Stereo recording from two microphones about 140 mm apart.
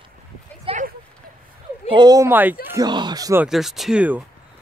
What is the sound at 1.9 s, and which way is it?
Speech, 30° right (ahead or behind).